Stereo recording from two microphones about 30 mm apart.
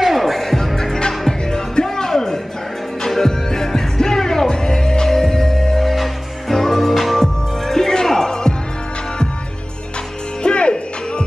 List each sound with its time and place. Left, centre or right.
0.0 s music: centre
1.5 s music: left
10.4 s music: left